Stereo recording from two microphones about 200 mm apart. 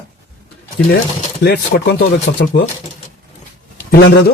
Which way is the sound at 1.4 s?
55° left (ahead or behind).